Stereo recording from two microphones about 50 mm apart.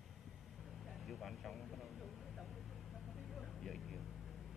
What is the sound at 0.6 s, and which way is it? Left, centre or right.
Vehicle, centre.